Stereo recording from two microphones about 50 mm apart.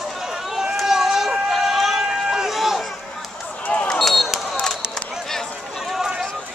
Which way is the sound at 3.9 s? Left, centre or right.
Centre.